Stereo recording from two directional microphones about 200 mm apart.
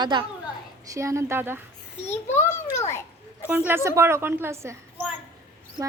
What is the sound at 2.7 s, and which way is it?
Speech, 10° left (ahead or behind).